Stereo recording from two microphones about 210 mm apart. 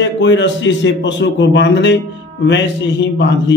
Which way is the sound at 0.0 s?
60° left (ahead or behind).